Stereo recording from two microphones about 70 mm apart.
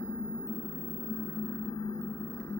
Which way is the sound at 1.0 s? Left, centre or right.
Left.